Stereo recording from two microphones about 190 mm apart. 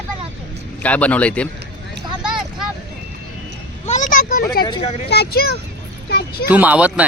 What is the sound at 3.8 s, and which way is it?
Vehicle, 40° left (ahead or behind).